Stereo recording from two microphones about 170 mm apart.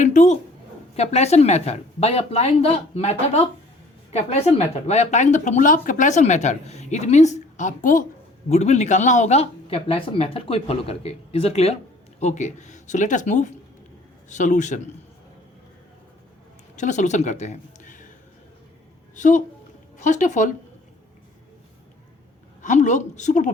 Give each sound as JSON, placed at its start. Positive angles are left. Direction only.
{"t": 0.0, "sound": "a sound", "side_deg": 45}
{"t": 0.9, "sound": "speech", "side_deg": 40}
{"t": 16.7, "sound": "speech", "side_deg": 45}
{"t": 19.1, "sound": "speech", "side_deg": 45}
{"t": 22.6, "sound": "speech", "side_deg": 45}